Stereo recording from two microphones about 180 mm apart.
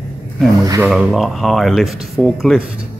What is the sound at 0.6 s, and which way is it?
Speech, 15° right (ahead or behind).